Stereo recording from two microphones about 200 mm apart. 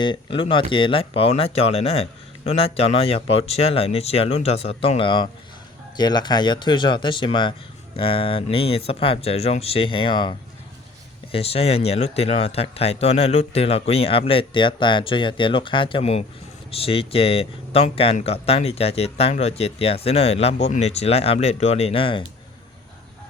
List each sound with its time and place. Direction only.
0.0 s speech: 25° left (ahead or behind)